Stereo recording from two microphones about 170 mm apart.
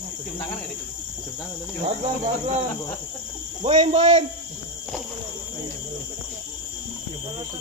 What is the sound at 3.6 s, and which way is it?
Speech, 35° right (ahead or behind).